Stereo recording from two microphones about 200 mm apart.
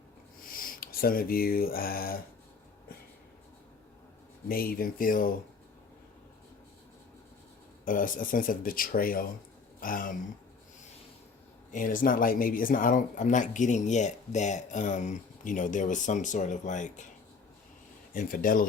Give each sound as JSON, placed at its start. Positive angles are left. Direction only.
{"t": 0.4, "sound": "speech", "side_deg": 45}
{"t": 4.4, "sound": "speech", "side_deg": 45}
{"t": 7.9, "sound": "speech", "side_deg": 45}
{"t": 11.7, "sound": "speech", "side_deg": 40}
{"t": 18.1, "sound": "speech", "side_deg": 45}